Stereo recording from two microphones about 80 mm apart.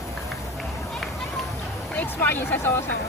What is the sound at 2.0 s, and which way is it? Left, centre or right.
Speech, left.